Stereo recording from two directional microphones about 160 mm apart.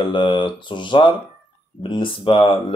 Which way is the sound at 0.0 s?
30° left (ahead or behind).